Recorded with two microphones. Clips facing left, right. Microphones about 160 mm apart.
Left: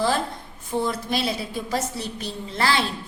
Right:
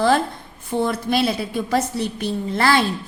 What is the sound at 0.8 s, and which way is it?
A woman's voice, 60° right (ahead or behind).